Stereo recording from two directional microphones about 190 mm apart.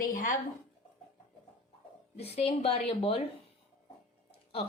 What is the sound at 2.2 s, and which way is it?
A woman's voice, 30° left (ahead or behind).